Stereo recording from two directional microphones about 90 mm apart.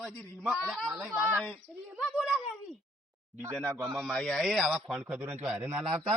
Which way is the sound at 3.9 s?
Centre (ahead or behind).